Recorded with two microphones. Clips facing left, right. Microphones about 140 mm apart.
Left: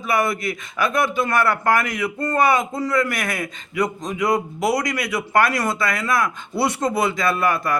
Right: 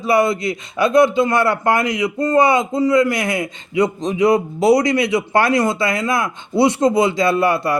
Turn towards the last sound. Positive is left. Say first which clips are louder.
# right 5 dB
turn(degrees=-30)  # may be behind; listen again after turning